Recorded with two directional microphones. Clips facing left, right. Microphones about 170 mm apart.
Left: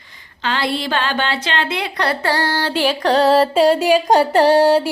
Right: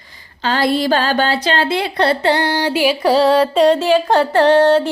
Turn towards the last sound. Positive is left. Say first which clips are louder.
# right 1 dB
turn(degrees=10)  # may be behind; listen again after turning